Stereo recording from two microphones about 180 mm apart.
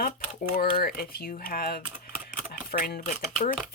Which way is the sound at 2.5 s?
55° left (ahead or behind).